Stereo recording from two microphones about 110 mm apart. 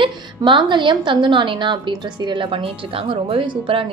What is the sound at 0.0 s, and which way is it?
Speech, 45° right (ahead or behind).